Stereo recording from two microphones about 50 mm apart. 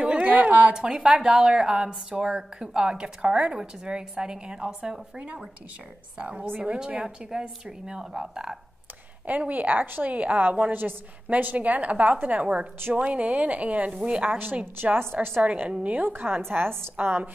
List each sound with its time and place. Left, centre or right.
0.0 s a sound: right
0.7 s a woman's voice: centre
9.2 s a woman's voice: right
14.4 s a woman's voice: right